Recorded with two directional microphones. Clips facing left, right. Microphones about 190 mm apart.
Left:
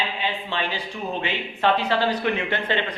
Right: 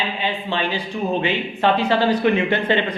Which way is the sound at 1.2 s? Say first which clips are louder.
Right 5 dB; 15° right (ahead or behind).